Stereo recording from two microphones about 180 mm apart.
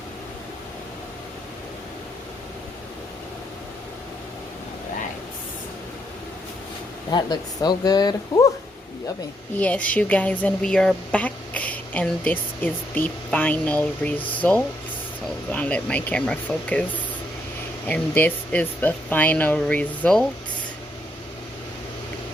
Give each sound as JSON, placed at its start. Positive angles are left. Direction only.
{"t": 7.1, "sound": "speech", "side_deg": 25}
{"t": 9.6, "sound": "speech", "side_deg": 10}
{"t": 15.5, "sound": "speech", "side_deg": 5}
{"t": 17.8, "sound": "speech", "side_deg": 10}